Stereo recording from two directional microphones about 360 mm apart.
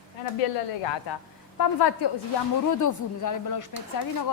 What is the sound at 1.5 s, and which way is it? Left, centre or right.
Speech, left.